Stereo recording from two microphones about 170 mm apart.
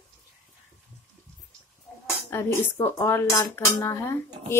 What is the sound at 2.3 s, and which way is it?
Speech, 15° left (ahead or behind).